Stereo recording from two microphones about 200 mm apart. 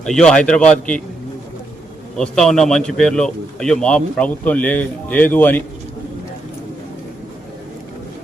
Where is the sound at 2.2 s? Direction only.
5° left (ahead or behind).